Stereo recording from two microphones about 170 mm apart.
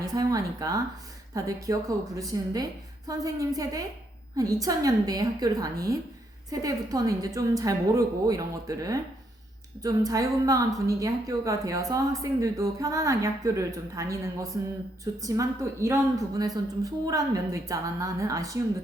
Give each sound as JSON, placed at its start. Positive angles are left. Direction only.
{"t": 0.0, "sound": "a woman's voice", "side_deg": -20}